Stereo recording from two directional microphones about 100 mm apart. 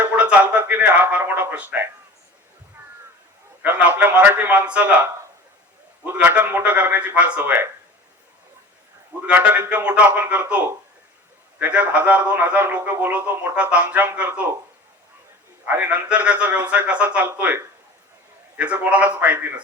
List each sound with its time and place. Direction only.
0.0 s a man's voice: 15° right (ahead or behind)
3.6 s speech: 15° right (ahead or behind)
6.1 s speech: 15° right (ahead or behind)
9.2 s speech: 15° right (ahead or behind)
15.6 s speech: 20° right (ahead or behind)